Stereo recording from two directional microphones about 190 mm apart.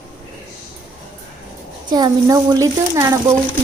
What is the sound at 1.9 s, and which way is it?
Speech, 20° right (ahead or behind).